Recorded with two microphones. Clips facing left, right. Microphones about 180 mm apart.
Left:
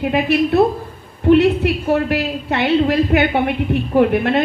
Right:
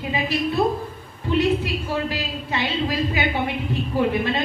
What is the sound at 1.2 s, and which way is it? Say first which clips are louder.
A woman's voice: left 9 dB; 65° left (ahead or behind).